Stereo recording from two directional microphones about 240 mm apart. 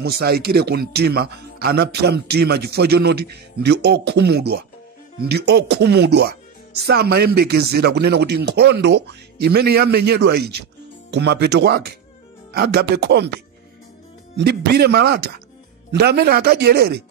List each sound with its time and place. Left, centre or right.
0.0 s a man's voice: right
14.3 s speech: right